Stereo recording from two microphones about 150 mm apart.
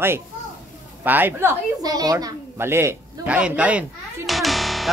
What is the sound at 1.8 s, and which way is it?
A woman's voice, 25° right (ahead or behind).